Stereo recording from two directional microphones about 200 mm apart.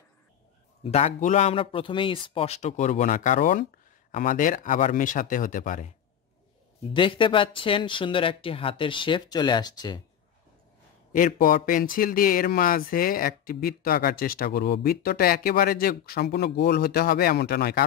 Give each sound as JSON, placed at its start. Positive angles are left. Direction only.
{"t": 0.8, "sound": "a man's voice", "side_deg": 35}
{"t": 6.9, "sound": "speech", "side_deg": 25}
{"t": 11.1, "sound": "speech", "side_deg": 45}